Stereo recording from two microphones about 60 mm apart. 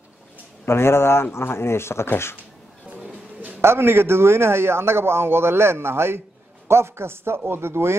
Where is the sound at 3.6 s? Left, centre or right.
Right.